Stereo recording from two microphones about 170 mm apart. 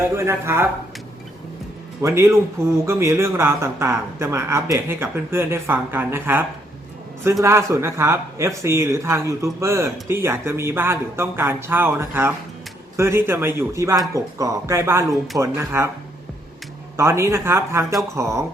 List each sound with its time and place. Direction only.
0.2 s speech: 15° right (ahead or behind)
2.0 s speech: 15° right (ahead or behind)
7.4 s speech: 15° right (ahead or behind)
17.0 s speech: 15° right (ahead or behind)